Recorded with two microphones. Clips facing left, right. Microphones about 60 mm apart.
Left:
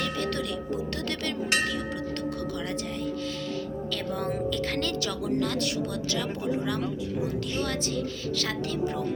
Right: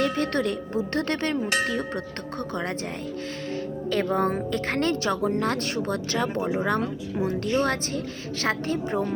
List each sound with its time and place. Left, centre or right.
0.0 s speech: right
3.9 s speech: right